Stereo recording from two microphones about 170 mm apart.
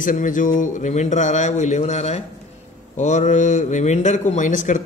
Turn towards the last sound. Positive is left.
turn(degrees=50)  # may be behind; listen again after turning